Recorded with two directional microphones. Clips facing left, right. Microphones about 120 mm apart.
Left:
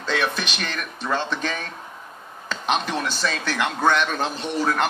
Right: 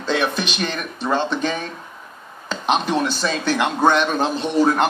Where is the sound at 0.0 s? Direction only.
20° right (ahead or behind).